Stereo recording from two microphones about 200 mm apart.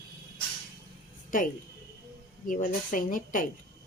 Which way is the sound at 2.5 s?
40° left (ahead or behind).